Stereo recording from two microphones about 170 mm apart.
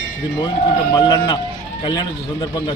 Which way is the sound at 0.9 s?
25° left (ahead or behind).